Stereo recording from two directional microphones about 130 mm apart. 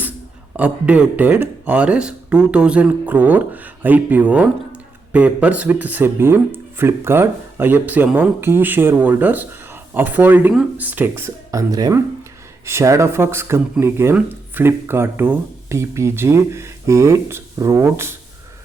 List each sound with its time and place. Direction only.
0.5 s speech: 10° right (ahead or behind)